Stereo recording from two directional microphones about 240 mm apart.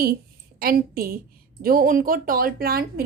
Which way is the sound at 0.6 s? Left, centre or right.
Right.